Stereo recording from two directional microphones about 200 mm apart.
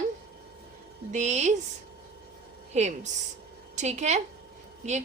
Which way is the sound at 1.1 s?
35° right (ahead or behind).